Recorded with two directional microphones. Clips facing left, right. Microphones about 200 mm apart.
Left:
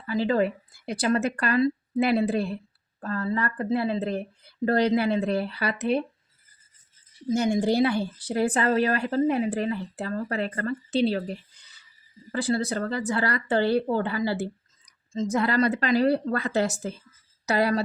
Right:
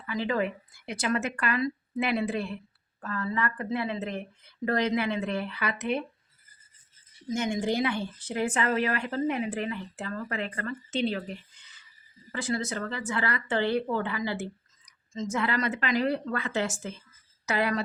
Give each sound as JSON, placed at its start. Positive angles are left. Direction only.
{"t": 0.0, "sound": "speech", "side_deg": 35}
{"t": 7.3, "sound": "speech", "side_deg": 35}